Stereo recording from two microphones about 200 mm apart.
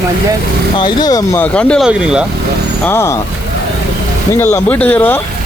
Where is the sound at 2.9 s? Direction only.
15° left (ahead or behind).